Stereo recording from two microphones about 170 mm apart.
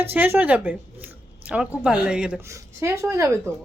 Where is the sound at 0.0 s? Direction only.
10° right (ahead or behind).